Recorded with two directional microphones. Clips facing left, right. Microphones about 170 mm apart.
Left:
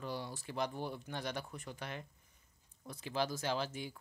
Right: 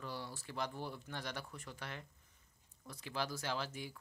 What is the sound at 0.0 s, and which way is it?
Speech, 20° left (ahead or behind).